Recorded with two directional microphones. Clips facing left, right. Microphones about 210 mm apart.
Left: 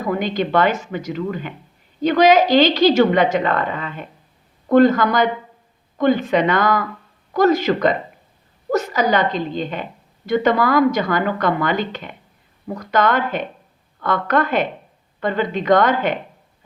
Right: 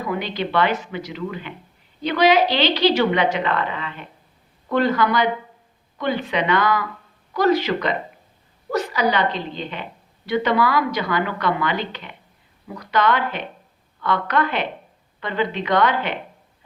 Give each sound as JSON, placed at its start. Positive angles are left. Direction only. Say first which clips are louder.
{"t": 0.0, "sound": "a woman's voice", "louder": "left 4 dB", "side_deg": 45}